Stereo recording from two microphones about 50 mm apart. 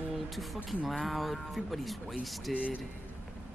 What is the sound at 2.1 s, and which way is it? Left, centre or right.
Speech, right.